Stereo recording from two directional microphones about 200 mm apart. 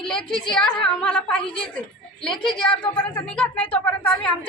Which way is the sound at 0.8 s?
5° left (ahead or behind).